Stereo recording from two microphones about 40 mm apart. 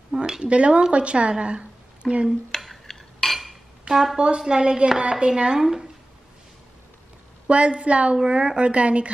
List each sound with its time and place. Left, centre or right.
0.1 s a sound: centre
0.5 s a woman's voice: right
2.6 s a sound: centre
3.9 s a woman's voice: centre
4.2 s a woman's voice: right
5.6 s a woman's voice: centre
7.4 s a woman's voice: right